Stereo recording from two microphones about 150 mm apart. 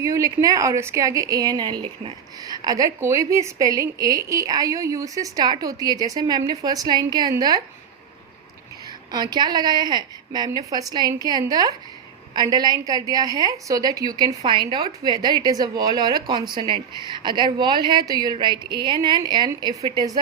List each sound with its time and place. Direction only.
0.0 s a woman's voice: 20° right (ahead or behind)
9.1 s a woman's voice: 30° right (ahead or behind)